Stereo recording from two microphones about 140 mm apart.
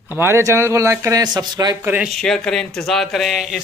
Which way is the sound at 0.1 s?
15° right (ahead or behind).